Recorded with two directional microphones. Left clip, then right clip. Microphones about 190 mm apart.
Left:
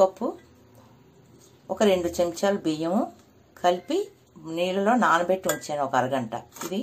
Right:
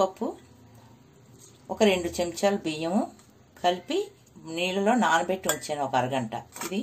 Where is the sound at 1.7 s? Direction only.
5° left (ahead or behind).